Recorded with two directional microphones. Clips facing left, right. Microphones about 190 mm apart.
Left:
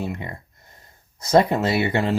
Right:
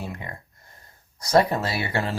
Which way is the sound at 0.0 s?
20° left (ahead or behind).